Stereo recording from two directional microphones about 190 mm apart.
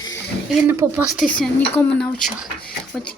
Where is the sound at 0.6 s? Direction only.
15° right (ahead or behind).